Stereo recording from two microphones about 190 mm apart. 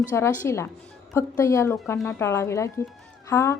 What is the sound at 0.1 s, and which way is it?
A woman's voice, 15° left (ahead or behind).